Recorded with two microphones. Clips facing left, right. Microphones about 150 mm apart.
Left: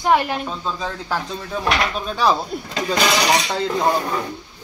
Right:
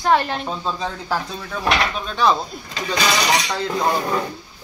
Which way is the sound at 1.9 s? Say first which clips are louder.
Even; 5° left (ahead or behind).